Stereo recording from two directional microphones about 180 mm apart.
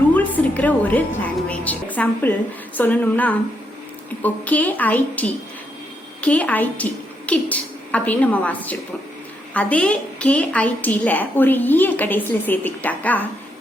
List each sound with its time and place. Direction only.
0.1 s a woman's voice: 10° left (ahead or behind)